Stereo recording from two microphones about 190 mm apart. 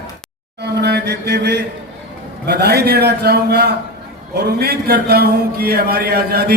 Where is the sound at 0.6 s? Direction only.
60° right (ahead or behind).